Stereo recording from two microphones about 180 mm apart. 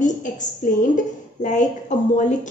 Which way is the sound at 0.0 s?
45° left (ahead or behind).